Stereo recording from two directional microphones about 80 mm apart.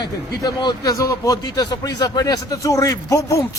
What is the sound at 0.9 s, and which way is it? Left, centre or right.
A man's voice, left.